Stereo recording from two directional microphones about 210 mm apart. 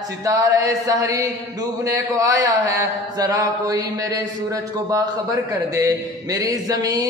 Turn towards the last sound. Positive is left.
turn(degrees=-15)  # may be behind; listen again after turning